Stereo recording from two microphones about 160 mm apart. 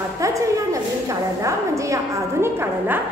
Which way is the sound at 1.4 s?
20° right (ahead or behind).